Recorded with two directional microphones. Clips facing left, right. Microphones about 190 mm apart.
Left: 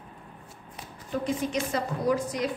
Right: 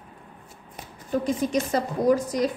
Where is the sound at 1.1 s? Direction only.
40° right (ahead or behind).